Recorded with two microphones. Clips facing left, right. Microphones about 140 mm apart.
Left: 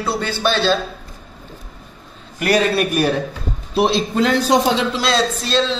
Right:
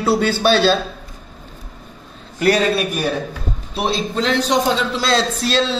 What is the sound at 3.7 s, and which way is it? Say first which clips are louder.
Speech: left 4 dB; centre (ahead or behind).